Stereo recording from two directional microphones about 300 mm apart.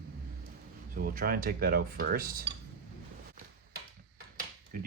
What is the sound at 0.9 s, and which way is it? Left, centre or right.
Speech, right.